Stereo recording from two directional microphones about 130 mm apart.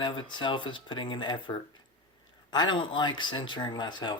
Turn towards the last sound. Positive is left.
turn(degrees=35)  # may be behind; listen again after turning